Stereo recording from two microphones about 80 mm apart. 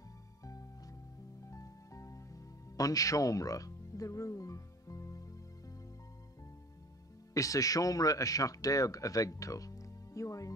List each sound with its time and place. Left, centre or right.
0.4 s music: left
7.3 s speech: left